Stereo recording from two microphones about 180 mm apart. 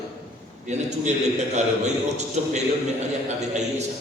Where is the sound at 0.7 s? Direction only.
40° right (ahead or behind).